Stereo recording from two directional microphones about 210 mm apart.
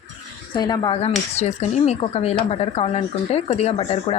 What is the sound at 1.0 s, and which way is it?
Speech, 30° left (ahead or behind).